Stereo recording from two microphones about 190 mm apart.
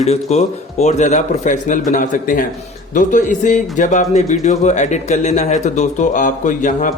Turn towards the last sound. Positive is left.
turn(degrees=40)  # may be behind; listen again after turning